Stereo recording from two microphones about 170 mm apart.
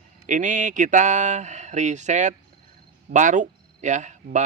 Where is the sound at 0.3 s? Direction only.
45° right (ahead or behind).